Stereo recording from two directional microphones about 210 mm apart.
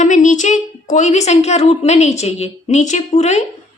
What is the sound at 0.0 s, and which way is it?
A woman's voice, 35° left (ahead or behind).